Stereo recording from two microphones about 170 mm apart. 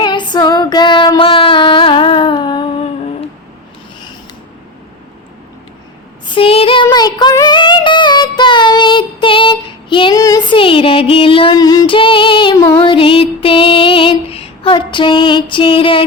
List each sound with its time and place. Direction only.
0.0 s female singing: 25° left (ahead or behind)
6.2 s female singing: 30° left (ahead or behind)